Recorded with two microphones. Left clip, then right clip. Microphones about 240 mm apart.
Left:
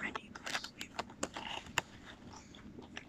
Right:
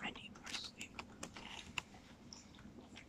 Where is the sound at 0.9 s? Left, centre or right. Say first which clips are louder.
Left 9 dB; left.